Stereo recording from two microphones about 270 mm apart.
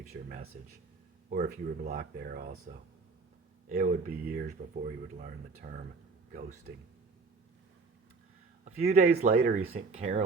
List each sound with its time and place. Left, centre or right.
0.0 s speech: right
3.7 s speech: right
8.6 s speech: right